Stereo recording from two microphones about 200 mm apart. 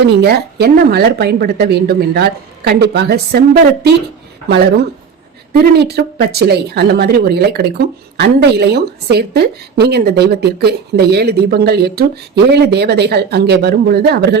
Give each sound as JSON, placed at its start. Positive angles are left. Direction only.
{"t": 0.0, "sound": "a woman's voice", "side_deg": -55}